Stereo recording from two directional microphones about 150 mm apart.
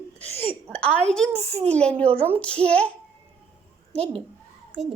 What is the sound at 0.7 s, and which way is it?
A child's voice, 10° left (ahead or behind).